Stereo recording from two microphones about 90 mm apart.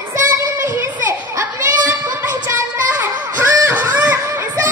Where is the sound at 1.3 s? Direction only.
30° right (ahead or behind).